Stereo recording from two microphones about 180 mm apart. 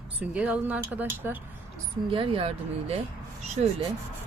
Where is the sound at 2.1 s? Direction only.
30° right (ahead or behind).